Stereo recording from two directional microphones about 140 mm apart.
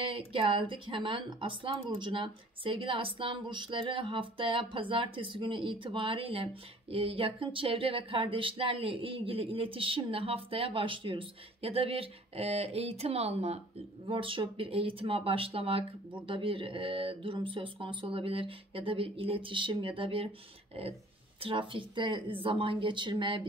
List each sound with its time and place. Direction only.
0.0 s speech: 40° right (ahead or behind)
14.0 s speech: 40° right (ahead or behind)
21.4 s speech: 40° right (ahead or behind)